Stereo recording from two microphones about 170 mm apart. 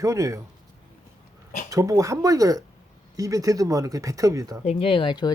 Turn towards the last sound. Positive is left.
turn(degrees=25)  # may be behind; listen again after turning